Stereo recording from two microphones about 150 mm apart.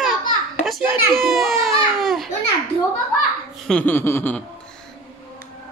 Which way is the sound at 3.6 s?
10° left (ahead or behind).